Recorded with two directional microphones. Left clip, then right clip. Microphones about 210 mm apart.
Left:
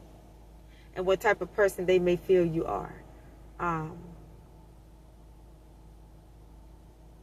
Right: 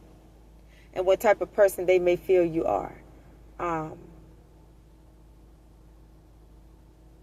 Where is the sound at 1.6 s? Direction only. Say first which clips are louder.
Right 3 dB; 30° right (ahead or behind).